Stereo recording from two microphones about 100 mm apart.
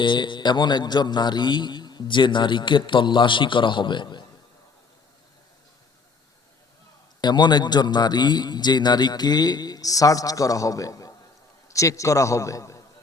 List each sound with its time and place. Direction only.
0.0 s a man's voice: 55° left (ahead or behind)
7.2 s a man's voice: 45° left (ahead or behind)